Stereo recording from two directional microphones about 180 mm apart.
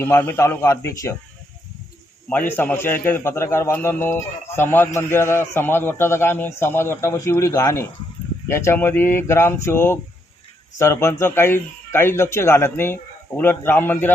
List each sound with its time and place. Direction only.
0.0 s speech: 10° left (ahead or behind)
2.3 s speech: 10° left (ahead or behind)